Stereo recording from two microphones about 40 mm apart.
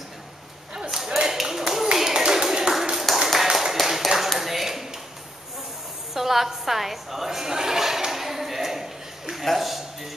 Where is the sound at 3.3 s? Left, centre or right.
Centre.